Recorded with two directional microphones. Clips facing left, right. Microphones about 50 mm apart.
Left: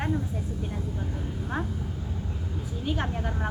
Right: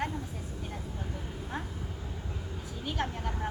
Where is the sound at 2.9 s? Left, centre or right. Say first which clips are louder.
Left 3 dB; centre.